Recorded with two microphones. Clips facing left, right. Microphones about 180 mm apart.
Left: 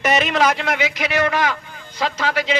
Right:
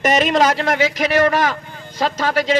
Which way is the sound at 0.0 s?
45° right (ahead or behind).